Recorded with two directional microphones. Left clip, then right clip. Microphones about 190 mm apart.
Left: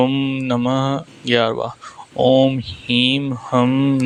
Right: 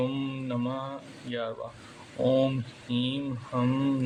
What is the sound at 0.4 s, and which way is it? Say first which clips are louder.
Speech: left 15 dB; 50° left (ahead or behind).